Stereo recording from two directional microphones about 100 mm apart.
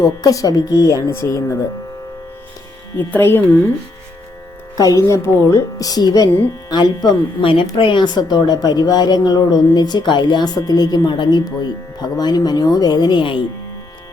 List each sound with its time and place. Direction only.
0.0 s speech: 35° left (ahead or behind)
3.0 s speech: 20° left (ahead or behind)
4.8 s a woman's voice: 35° left (ahead or behind); by 13.4 s 55° left (ahead or behind)